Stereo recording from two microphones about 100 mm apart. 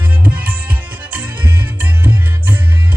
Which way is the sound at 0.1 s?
15° right (ahead or behind).